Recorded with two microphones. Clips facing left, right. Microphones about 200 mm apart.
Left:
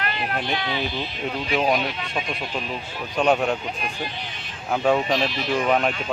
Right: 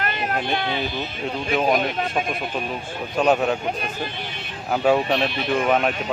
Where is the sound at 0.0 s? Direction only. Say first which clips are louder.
Right 2 dB; 45° right (ahead or behind).